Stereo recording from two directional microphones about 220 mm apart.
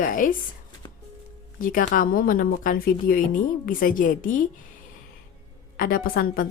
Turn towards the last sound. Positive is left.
turn(degrees=40)  # may be behind; listen again after turning